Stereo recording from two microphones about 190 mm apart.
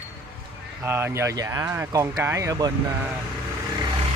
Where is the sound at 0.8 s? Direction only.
10° right (ahead or behind).